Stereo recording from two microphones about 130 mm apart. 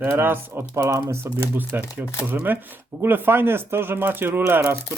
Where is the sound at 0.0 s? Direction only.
15° right (ahead or behind).